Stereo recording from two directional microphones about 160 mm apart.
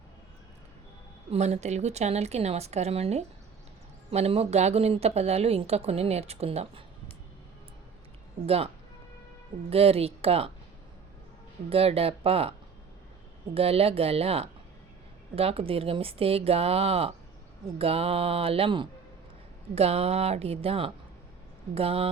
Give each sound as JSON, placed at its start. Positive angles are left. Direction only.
{"t": 1.3, "sound": "a woman's voice", "side_deg": -45}
{"t": 8.4, "sound": "speech", "side_deg": -40}
{"t": 11.7, "sound": "speech", "side_deg": -35}